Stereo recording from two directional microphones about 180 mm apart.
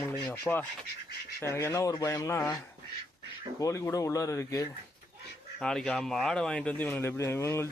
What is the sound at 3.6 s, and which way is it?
Speech, 15° left (ahead or behind).